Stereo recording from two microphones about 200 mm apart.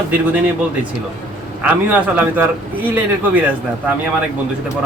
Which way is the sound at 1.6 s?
10° right (ahead or behind).